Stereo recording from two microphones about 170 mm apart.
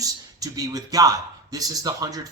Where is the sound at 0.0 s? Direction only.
20° right (ahead or behind).